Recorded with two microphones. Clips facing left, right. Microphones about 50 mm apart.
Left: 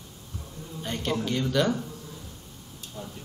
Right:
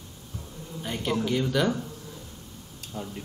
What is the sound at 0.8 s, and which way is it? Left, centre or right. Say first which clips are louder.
Speech: right 1 dB; centre.